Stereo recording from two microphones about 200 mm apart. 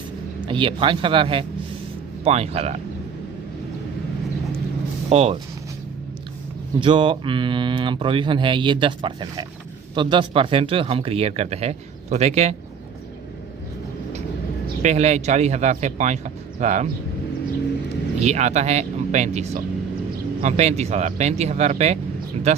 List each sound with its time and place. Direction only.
0.4 s speech: 25° right (ahead or behind)
5.0 s speech: 30° right (ahead or behind)
6.7 s speech: 25° right (ahead or behind)
14.8 s speech: 35° right (ahead or behind)
18.2 s speech: 35° right (ahead or behind)